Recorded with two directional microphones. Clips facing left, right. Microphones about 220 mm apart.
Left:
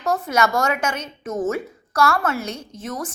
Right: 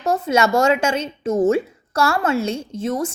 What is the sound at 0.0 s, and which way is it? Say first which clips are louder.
A woman's voice: right 3 dB; 25° right (ahead or behind).